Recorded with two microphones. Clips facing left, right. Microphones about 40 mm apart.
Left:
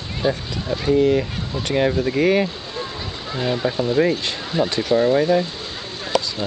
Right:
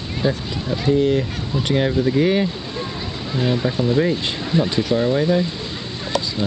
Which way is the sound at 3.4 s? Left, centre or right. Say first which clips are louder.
Right 1 dB; centre.